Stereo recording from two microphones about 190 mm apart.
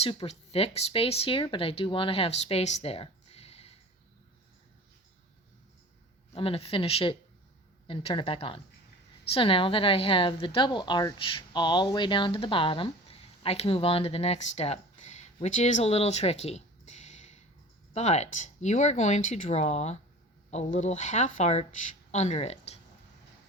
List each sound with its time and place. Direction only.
0.0 s a woman's voice: 30° left (ahead or behind)
2.8 s a sound: 30° left (ahead or behind)
6.3 s a woman's voice: 30° left (ahead or behind)